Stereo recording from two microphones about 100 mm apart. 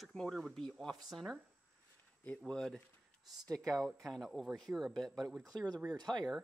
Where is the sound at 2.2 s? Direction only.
10° left (ahead or behind).